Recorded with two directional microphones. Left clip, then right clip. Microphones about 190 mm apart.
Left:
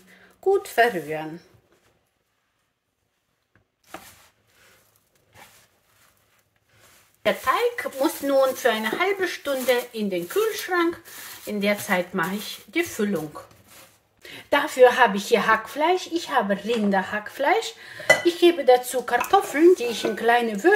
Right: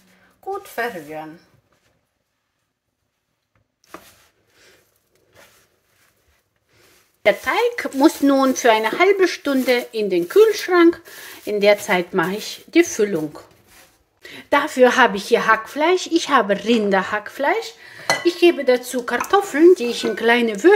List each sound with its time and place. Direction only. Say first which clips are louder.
0.6 s speech: left 3 dB; 70° left (ahead or behind)
7.2 s speech: right 4 dB; 35° right (ahead or behind)
14.2 s speech: right 4 dB; 20° right (ahead or behind)
15.9 s speech: right 10 dB; 35° right (ahead or behind); by 17.6 s 15° right (ahead or behind)
17.6 s speech: even; 5° right (ahead or behind); by 20.7 s 35° right (ahead or behind)